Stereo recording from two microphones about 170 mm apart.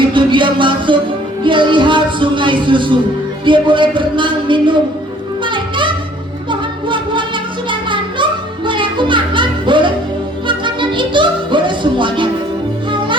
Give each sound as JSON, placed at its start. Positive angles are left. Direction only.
{"t": 0.1, "sound": "music", "side_deg": -30}